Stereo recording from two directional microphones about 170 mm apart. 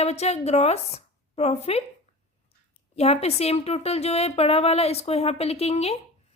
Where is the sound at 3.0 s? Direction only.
40° left (ahead or behind).